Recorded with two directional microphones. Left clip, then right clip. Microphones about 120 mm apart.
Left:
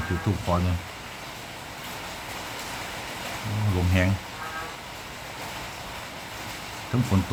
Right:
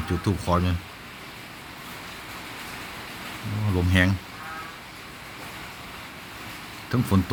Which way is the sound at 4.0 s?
20° right (ahead or behind).